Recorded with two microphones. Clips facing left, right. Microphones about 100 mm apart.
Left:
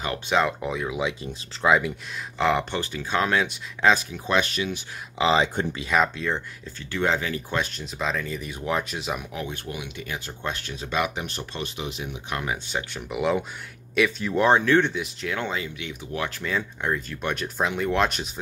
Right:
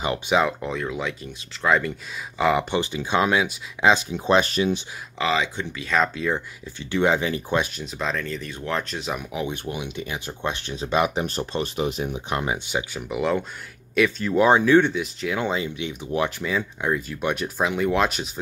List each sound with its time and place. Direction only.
0.3 s speech: centre (ahead or behind)
2.3 s speech: 5° right (ahead or behind)
2.7 s speech: 15° right (ahead or behind)
3.9 s speech: 25° right (ahead or behind)
5.2 s speech: 30° left (ahead or behind)
6.1 s speech: 5° right (ahead or behind)
6.8 s speech: 15° right (ahead or behind)
7.6 s speech: 5° right (ahead or behind)
9.3 s speech: 15° right (ahead or behind)
9.7 s speech: 25° right (ahead or behind)
13.1 s speech: 5° left (ahead or behind)
15.3 s speech: 20° right (ahead or behind)
16.4 s speech: 5° right (ahead or behind)